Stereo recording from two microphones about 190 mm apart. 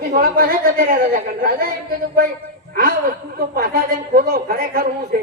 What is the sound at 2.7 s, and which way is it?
A woman's voice, 50° right (ahead or behind).